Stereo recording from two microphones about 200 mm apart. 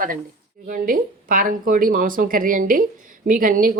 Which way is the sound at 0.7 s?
45° right (ahead or behind).